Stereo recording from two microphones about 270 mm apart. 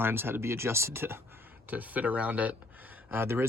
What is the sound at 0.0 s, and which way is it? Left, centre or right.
Speech, centre.